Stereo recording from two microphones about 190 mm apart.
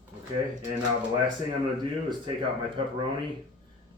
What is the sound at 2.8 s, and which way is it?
Speech, 25° right (ahead or behind).